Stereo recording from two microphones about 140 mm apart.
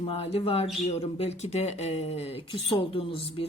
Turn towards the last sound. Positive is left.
turn(degrees=40)  # may be behind; listen again after turning